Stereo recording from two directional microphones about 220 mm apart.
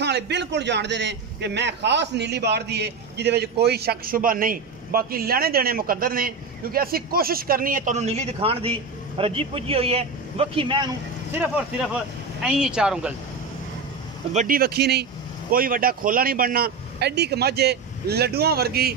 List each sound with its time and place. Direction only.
0.0 s a man's voice: 50° right (ahead or behind); by 10.9 s 25° right (ahead or behind)
12.4 s speech: 5° right (ahead or behind)
14.3 s a man's voice: 35° right (ahead or behind)